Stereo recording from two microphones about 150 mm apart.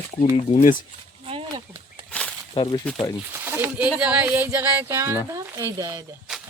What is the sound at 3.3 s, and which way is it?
Speech, 15° right (ahead or behind).